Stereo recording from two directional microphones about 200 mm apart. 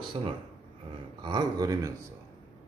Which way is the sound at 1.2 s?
20° right (ahead or behind).